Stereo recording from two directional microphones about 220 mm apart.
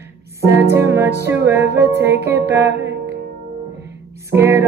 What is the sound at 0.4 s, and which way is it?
Music, 10° right (ahead or behind).